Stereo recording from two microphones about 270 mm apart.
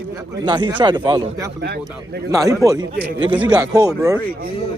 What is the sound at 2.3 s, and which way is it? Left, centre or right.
Speech, centre.